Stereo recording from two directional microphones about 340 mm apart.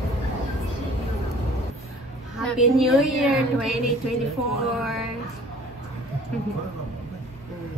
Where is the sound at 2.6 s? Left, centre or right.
Centre.